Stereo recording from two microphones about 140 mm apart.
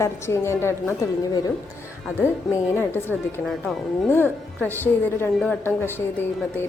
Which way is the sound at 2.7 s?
15° left (ahead or behind).